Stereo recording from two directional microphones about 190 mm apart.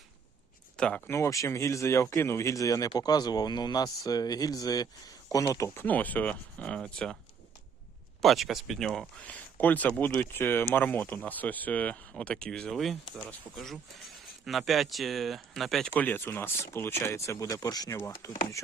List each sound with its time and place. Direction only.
0.8 s speech: 5° left (ahead or behind)
8.2 s speech: centre (ahead or behind); by 18.3 s 15° left (ahead or behind)